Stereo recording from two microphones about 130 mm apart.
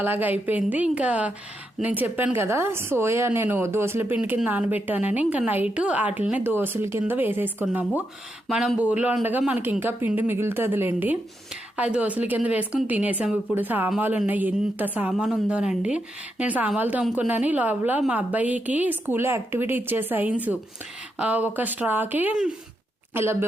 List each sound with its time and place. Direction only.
0.0 s a woman's voice: 15° right (ahead or behind)